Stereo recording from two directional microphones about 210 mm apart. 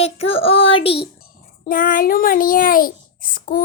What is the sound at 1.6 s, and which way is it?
A woman's voice, 40° left (ahead or behind).